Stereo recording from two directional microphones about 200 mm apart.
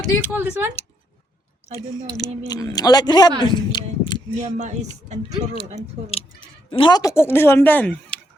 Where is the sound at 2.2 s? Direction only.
20° left (ahead or behind).